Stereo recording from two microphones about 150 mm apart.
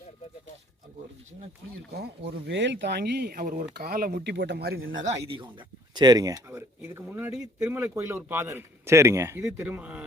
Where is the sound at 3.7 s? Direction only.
85° right.